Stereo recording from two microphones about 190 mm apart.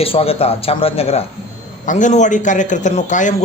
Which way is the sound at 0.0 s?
30° left (ahead or behind).